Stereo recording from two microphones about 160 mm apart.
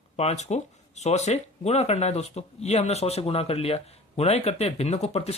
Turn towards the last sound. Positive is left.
turn(degrees=40)  # may be behind; listen again after turning